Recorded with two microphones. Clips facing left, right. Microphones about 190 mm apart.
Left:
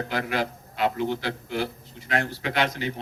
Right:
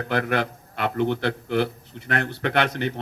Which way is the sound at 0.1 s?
60° right (ahead or behind).